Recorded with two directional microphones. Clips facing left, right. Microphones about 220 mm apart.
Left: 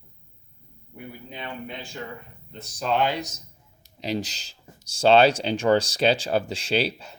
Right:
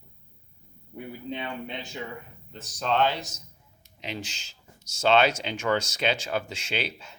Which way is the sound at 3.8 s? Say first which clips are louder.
Left 8 dB; 35° left (ahead or behind).